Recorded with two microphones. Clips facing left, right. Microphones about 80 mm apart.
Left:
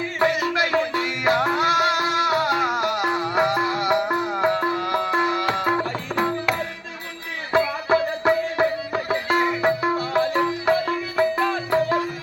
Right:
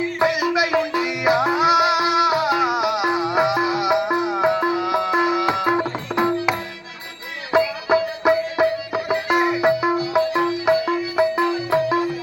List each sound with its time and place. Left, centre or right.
0.2 s music: centre
6.1 s tabla: centre
7.5 s music: centre
10.0 s music: left
10.3 s music: centre